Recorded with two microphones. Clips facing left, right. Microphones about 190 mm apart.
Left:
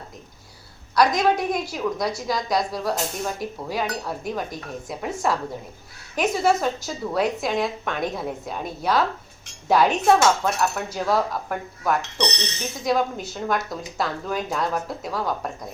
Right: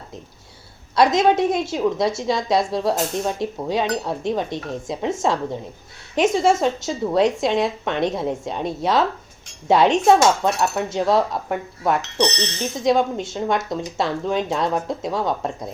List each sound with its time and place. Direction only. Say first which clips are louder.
0.9 s a woman's voice: right 3 dB; 25° right (ahead or behind)
6.1 s a woman's voice: right 4 dB; 25° right (ahead or behind)